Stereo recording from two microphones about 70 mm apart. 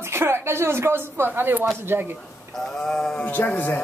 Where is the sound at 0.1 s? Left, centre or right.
Right.